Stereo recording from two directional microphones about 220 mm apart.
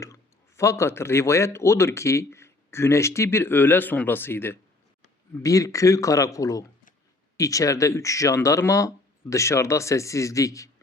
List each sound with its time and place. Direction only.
0.0 s speech: 15° left (ahead or behind)